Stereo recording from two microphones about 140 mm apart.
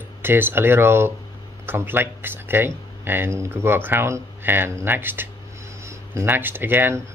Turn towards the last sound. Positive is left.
turn(degrees=-15)  # may be behind; listen again after turning